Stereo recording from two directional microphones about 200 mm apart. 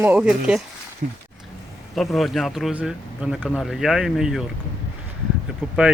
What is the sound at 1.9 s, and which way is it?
Speech, centre (ahead or behind).